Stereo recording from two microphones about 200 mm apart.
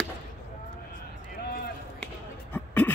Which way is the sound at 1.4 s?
45° left (ahead or behind).